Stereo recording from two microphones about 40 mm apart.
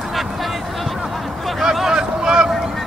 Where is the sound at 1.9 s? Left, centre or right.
Centre.